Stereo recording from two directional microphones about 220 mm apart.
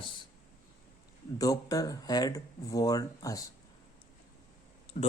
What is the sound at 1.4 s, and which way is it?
Speech, 15° left (ahead or behind).